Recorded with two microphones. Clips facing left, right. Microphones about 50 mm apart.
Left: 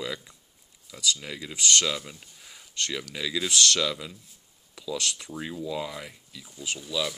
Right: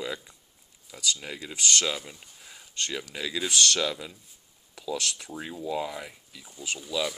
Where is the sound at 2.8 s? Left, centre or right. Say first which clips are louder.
Left 1 dB; right.